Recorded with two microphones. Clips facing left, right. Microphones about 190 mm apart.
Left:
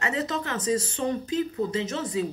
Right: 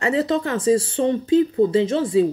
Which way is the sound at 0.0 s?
30° right (ahead or behind).